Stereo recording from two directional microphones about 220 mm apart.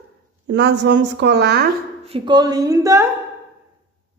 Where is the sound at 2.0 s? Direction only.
25° right (ahead or behind).